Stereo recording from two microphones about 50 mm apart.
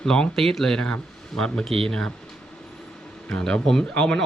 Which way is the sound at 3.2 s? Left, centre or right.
Centre.